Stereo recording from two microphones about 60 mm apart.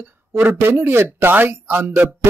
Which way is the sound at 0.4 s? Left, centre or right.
Right.